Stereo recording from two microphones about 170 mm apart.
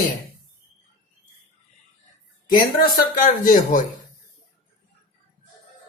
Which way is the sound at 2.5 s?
60° left (ahead or behind).